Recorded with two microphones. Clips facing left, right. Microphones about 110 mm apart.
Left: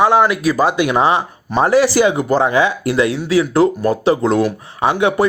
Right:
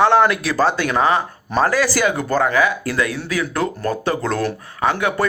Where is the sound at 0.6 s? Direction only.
15° left (ahead or behind).